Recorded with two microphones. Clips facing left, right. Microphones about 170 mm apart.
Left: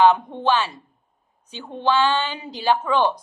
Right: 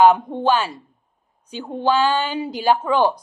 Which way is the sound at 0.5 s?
35° right (ahead or behind).